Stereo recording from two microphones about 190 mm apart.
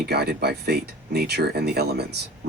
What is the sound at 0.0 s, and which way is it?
Speech, 60° right (ahead or behind).